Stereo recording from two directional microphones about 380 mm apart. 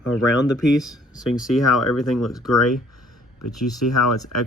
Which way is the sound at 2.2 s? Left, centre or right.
Centre.